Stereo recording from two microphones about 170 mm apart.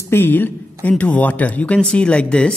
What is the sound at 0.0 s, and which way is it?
A man's voice, 15° left (ahead or behind).